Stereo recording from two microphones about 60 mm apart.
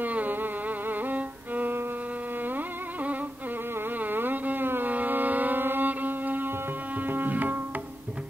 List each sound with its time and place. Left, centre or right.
0.0 s music: right
4.0 s carnatic music: right
7.0 s tabla: right